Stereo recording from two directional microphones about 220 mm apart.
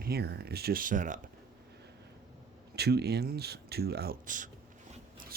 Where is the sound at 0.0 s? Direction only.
45° right (ahead or behind).